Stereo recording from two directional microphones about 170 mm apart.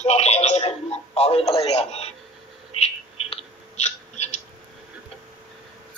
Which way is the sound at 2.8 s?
35° left (ahead or behind).